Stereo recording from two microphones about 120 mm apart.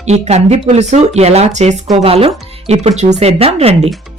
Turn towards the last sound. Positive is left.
turn(degrees=-55)  # may be behind; listen again after turning